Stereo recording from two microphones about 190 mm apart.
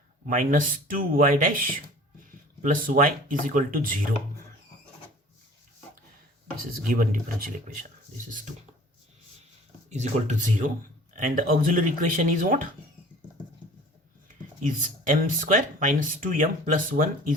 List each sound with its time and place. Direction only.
0.3 s speech: 45° right (ahead or behind)
6.8 s speech: 45° right (ahead or behind)
9.9 s speech: 40° right (ahead or behind)
14.6 s speech: 45° right (ahead or behind)